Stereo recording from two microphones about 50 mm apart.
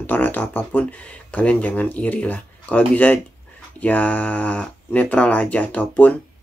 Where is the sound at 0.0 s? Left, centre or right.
Left.